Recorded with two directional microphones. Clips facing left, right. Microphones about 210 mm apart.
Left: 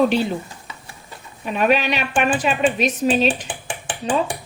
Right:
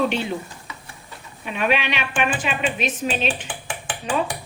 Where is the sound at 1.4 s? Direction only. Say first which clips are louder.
Left 4 dB; 40° left (ahead or behind).